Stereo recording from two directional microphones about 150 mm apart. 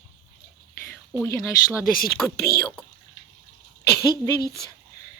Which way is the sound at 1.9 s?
75° left (ahead or behind).